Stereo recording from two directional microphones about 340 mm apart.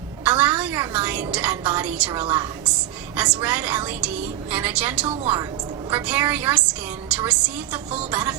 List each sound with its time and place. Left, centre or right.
0.3 s a woman's voice: centre